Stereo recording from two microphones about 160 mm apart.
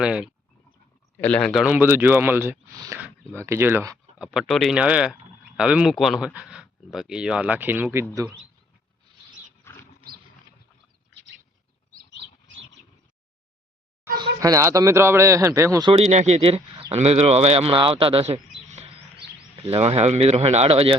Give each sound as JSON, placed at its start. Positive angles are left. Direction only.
{"t": 0.0, "sound": "speech", "side_deg": -5}
{"t": 1.2, "sound": "speech", "side_deg": 5}
{"t": 1.6, "sound": "speech", "side_deg": -10}
{"t": 2.7, "sound": "speech", "side_deg": -25}
{"t": 4.2, "sound": "speech", "side_deg": -5}
{"t": 9.7, "sound": "wild animals", "side_deg": 15}
{"t": 11.9, "sound": "rodents", "side_deg": -60}
{"t": 14.4, "sound": "speech", "side_deg": -20}
{"t": 15.9, "sound": "speech", "side_deg": -40}
{"t": 18.7, "sound": "chirp", "side_deg": -40}
{"t": 19.6, "sound": "speech", "side_deg": -40}